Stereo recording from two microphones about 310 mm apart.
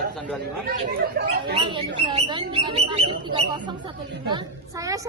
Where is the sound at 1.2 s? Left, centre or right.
Right.